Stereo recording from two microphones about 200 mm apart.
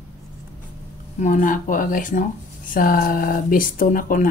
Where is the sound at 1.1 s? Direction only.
40° left (ahead or behind).